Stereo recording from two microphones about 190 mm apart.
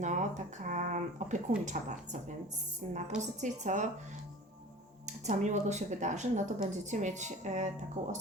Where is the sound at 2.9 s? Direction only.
40° right (ahead or behind).